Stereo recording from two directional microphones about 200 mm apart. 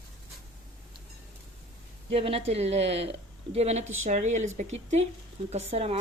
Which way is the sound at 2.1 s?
30° right (ahead or behind).